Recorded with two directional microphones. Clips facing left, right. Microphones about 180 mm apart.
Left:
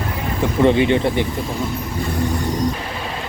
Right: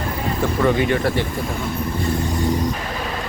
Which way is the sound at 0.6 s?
25° left (ahead or behind).